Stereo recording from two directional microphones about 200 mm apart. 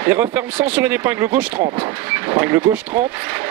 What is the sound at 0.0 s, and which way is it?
Speech, 10° right (ahead or behind).